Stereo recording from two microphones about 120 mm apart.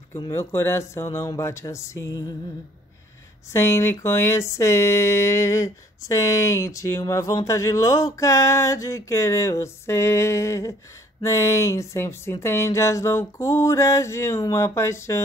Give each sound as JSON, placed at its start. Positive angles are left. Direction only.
{"t": 0.3, "sound": "speech", "side_deg": 20}
{"t": 3.5, "sound": "speech", "side_deg": 20}